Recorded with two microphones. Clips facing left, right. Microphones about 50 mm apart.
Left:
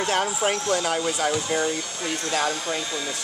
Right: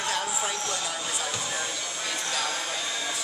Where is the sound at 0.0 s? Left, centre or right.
Left.